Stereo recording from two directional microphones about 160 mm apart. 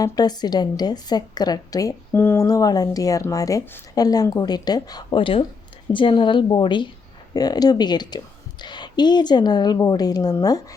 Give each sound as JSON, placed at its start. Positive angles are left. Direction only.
{"t": 0.0, "sound": "a woman's voice", "side_deg": 25}